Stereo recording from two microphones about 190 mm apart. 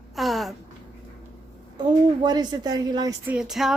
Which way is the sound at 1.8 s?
20° right (ahead or behind).